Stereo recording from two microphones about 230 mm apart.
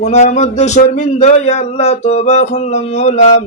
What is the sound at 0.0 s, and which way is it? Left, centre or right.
Speech, left.